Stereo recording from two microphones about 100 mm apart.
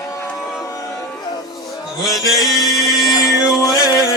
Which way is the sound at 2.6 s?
35° left (ahead or behind).